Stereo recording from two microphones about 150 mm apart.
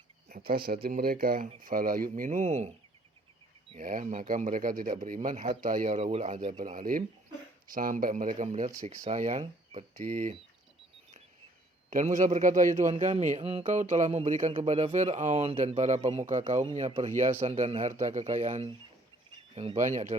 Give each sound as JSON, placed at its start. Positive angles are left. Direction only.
{"t": 0.3, "sound": "speech", "side_deg": -70}
{"t": 3.8, "sound": "speech", "side_deg": -60}
{"t": 6.0, "sound": "speech", "side_deg": -45}
{"t": 11.9, "sound": "speech", "side_deg": -55}
{"t": 13.7, "sound": "speech", "side_deg": -55}
{"t": 18.0, "sound": "speech", "side_deg": -55}
{"t": 19.5, "sound": "speech", "side_deg": -40}
{"t": 19.8, "sound": "speech", "side_deg": -55}